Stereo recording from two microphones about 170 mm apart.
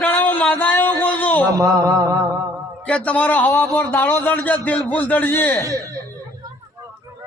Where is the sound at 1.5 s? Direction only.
20° right (ahead or behind).